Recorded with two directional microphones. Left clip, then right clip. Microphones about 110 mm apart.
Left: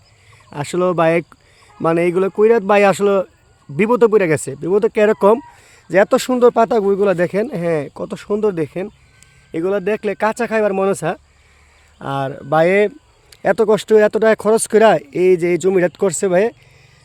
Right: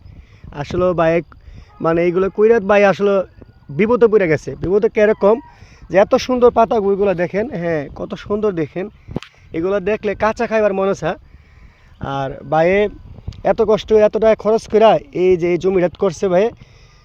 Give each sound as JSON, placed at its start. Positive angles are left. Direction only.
{"t": 0.5, "sound": "speech", "side_deg": 40}
{"t": 11.9, "sound": "speech", "side_deg": 45}